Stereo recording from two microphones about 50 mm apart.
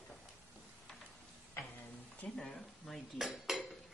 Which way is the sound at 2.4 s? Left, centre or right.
Centre.